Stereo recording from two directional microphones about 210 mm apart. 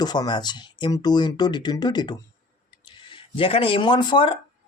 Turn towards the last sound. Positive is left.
turn(degrees=20)  # may be behind; listen again after turning